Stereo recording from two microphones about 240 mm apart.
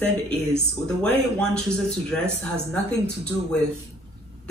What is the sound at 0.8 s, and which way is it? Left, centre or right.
A man's voice, centre.